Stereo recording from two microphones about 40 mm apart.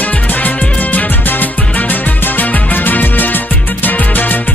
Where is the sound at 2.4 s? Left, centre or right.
Left.